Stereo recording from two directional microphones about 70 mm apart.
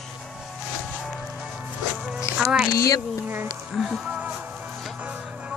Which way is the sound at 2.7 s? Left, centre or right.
Left.